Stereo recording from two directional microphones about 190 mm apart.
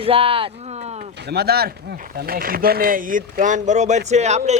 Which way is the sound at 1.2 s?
55° right (ahead or behind).